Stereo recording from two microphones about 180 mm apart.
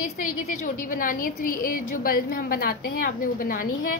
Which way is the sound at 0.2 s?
50° left (ahead or behind).